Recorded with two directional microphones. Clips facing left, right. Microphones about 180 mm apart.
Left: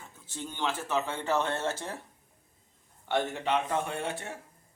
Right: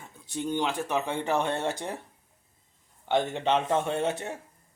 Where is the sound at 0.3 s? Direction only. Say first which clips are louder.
Right 5 dB; 15° right (ahead or behind).